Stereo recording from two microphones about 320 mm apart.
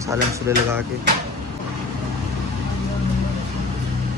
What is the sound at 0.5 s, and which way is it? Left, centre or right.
Speech, centre.